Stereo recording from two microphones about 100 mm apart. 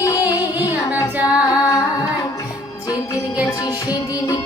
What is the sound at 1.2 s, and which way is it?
Female singing, 15° right (ahead or behind).